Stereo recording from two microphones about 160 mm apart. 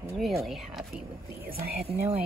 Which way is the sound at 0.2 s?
Centre (ahead or behind).